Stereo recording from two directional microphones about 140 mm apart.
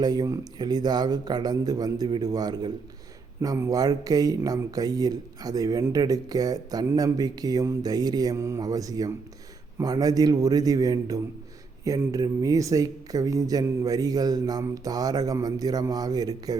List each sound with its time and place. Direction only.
0.0 s speech: 30° right (ahead or behind)